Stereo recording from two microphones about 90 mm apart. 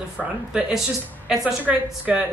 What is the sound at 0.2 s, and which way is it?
Speech, 5° left (ahead or behind).